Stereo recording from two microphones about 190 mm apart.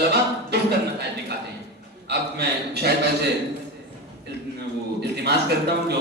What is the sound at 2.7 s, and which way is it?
Speech, 60° right (ahead or behind).